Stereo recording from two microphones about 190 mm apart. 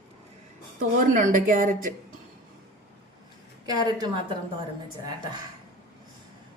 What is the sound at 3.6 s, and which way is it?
Speech, 20° right (ahead or behind).